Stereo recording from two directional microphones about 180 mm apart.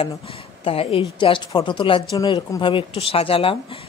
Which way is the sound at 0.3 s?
30° left (ahead or behind).